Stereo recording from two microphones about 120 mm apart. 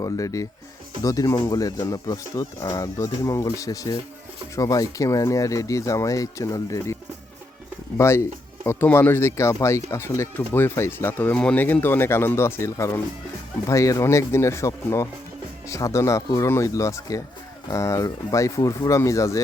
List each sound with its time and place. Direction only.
0.0 s speech: 30° left (ahead or behind)
7.9 s speech: 25° left (ahead or behind)